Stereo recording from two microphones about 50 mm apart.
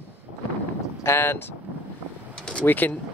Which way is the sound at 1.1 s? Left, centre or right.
Left.